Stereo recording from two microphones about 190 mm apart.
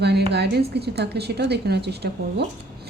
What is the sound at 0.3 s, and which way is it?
A woman's voice, 60° right (ahead or behind).